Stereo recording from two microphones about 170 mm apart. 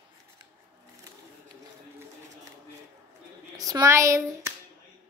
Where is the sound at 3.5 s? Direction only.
20° right (ahead or behind).